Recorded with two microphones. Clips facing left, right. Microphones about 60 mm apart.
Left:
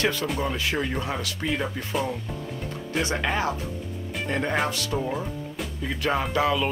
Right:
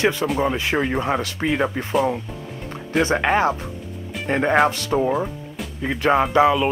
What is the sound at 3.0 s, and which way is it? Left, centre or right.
Speech, right.